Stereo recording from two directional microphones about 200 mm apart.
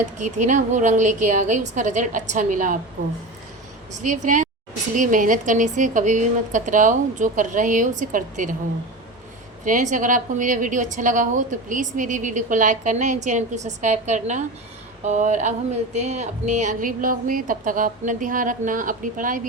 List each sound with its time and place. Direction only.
0.0 s a woman's voice: 35° right (ahead or behind)
4.0 s a woman's voice: 40° right (ahead or behind)
9.6 s a woman's voice: 40° right (ahead or behind)